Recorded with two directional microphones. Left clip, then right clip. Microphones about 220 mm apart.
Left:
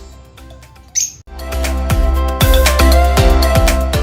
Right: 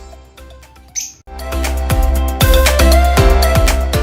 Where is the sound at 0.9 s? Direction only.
Centre (ahead or behind).